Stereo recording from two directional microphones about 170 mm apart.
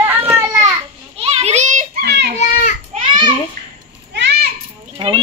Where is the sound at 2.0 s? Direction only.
80° right.